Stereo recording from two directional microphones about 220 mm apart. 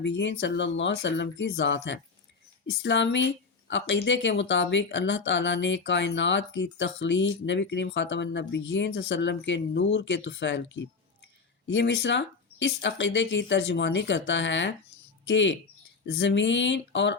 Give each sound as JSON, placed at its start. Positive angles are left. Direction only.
{"t": 0.0, "sound": "speech", "side_deg": 55}